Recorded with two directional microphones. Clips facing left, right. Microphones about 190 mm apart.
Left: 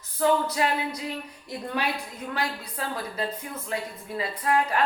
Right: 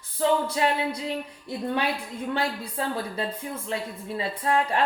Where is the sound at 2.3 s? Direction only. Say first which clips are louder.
Right 3 dB; 30° right (ahead or behind).